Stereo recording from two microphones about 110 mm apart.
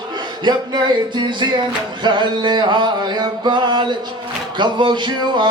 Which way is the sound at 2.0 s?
45° right (ahead or behind).